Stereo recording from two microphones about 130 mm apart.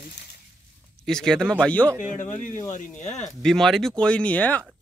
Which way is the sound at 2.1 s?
80° left.